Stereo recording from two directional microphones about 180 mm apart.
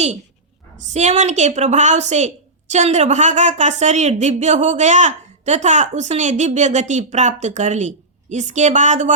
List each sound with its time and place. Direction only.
0.8 s a woman's voice: 40° right (ahead or behind)